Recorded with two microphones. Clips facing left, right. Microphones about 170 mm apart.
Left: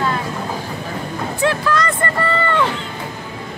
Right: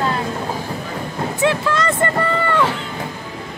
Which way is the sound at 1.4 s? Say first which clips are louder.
Even; 25° right (ahead or behind).